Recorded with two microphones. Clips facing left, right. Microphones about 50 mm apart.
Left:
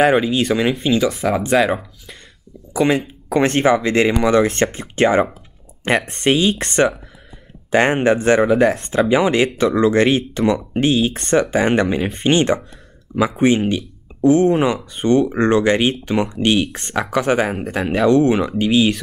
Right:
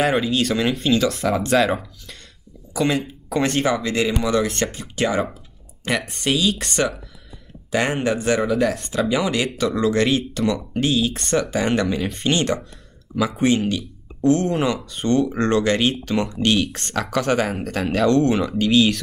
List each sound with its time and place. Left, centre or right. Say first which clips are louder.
0.3 s speech: left 3 dB; centre
2.7 s speech: left 4 dB; left